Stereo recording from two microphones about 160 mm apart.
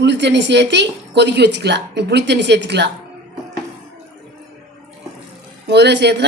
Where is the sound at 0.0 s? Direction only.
90° right.